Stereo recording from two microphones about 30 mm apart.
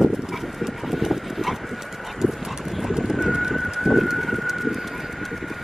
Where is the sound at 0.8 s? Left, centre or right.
Centre.